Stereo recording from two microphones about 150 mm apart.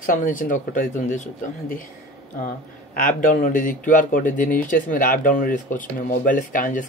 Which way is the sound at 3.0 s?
60° left (ahead or behind).